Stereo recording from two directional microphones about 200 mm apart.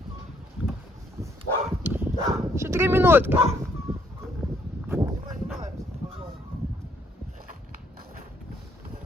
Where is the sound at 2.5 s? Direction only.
15° right (ahead or behind).